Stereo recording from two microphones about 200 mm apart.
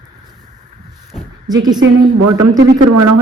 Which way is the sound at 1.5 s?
20° right (ahead or behind).